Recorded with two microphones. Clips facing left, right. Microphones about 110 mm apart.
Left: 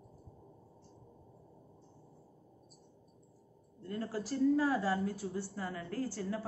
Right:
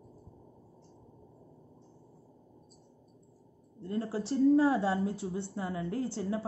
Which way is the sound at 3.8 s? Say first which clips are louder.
Right 4 dB; 30° right (ahead or behind).